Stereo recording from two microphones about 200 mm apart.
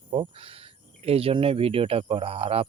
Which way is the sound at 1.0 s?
30° right (ahead or behind).